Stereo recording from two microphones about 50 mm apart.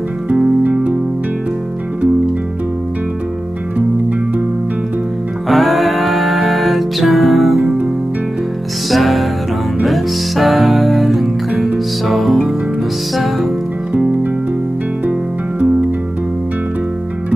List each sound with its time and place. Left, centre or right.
5.5 s music: centre
7.6 s music: right
8.9 s music: centre